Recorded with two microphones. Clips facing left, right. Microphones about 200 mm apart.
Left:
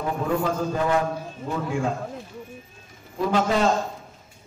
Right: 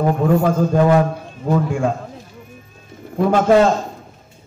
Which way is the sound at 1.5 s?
50° right (ahead or behind).